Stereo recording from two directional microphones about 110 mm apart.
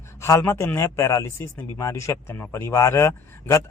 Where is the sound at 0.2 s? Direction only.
25° left (ahead or behind).